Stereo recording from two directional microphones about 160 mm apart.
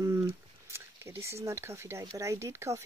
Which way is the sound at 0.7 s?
15° right (ahead or behind).